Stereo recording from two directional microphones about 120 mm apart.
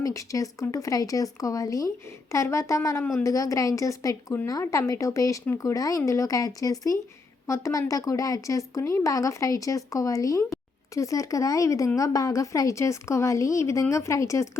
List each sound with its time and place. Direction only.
0.0 s speech: 25° left (ahead or behind)
3.0 s a woman's voice: 15° left (ahead or behind)
3.2 s speech: 30° left (ahead or behind)